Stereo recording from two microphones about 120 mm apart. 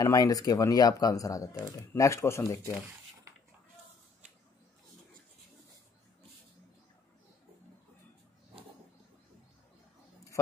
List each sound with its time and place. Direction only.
0.0 s speech: 30° left (ahead or behind)